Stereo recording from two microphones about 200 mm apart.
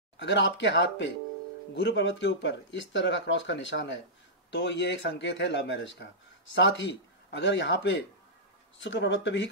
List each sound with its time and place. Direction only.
0.2 s speech: 60° left (ahead or behind)